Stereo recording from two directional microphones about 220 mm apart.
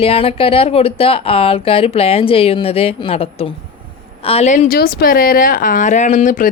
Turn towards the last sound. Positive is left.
turn(degrees=35)  # may be behind; listen again after turning